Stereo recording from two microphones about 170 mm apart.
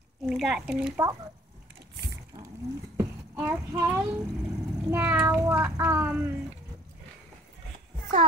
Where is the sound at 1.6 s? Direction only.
70° right (ahead or behind).